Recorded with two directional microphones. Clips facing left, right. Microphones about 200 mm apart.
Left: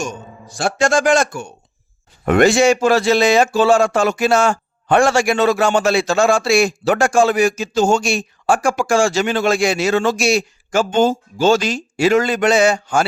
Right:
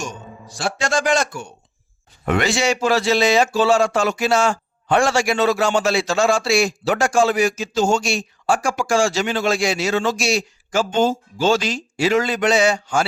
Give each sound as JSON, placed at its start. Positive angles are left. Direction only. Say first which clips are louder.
{"t": 0.0, "sound": "a man's voice", "louder": "left 4 dB", "side_deg": 50}